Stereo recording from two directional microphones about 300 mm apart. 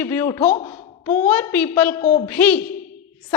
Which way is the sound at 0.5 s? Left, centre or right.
Centre.